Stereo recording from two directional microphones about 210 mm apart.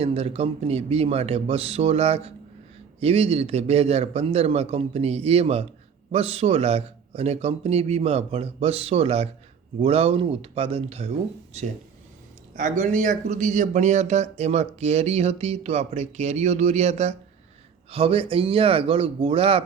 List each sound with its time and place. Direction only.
0.0 s a man's voice: 30° right (ahead or behind)